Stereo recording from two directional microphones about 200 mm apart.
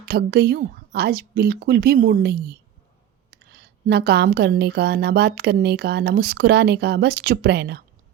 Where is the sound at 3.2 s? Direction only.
55° right (ahead or behind).